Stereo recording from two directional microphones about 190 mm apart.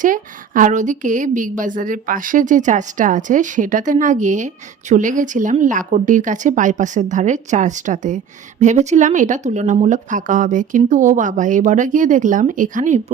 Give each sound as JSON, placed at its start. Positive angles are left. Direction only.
{"t": 0.0, "sound": "a woman's voice", "side_deg": -45}